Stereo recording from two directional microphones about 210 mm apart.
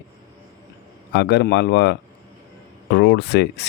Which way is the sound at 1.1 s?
55° left (ahead or behind).